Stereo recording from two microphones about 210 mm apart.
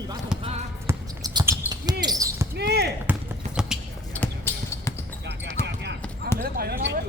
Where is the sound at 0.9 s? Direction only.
20° right (ahead or behind).